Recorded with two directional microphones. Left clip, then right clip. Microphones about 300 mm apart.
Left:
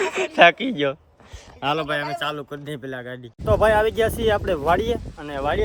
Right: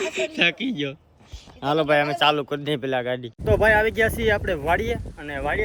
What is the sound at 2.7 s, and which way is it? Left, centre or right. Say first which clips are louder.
Speech: right 9 dB; right.